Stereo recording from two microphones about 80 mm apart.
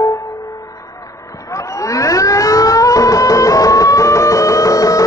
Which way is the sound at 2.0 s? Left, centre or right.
Left.